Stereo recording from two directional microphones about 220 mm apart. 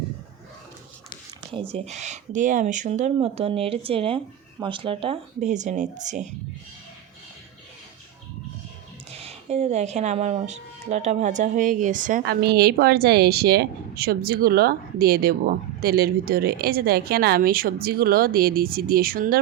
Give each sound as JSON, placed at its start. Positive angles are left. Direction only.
{"t": 1.7, "sound": "speech", "side_deg": -30}
{"t": 9.1, "sound": "speech", "side_deg": -25}